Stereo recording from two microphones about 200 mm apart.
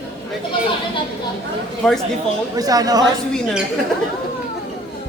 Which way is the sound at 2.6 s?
20° right (ahead or behind).